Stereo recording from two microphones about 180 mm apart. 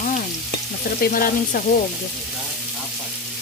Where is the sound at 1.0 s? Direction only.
55° left (ahead or behind).